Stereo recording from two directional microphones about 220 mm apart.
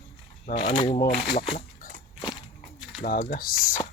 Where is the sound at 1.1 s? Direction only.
45° left (ahead or behind).